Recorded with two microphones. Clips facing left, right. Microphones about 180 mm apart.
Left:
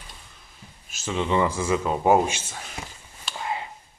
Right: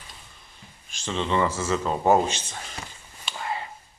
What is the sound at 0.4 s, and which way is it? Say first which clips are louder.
Speech: left 1 dB; 5° left (ahead or behind).